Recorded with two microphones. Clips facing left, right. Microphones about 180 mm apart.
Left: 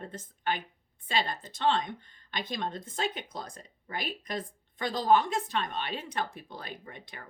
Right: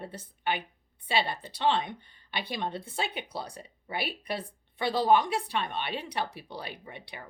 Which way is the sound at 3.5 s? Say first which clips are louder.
Right 2 dB; 10° right (ahead or behind).